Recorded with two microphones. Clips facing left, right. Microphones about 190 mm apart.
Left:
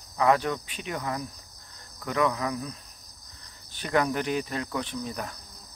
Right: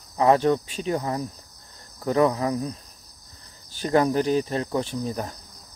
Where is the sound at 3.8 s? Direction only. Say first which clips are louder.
Right 5 dB; 35° right (ahead or behind).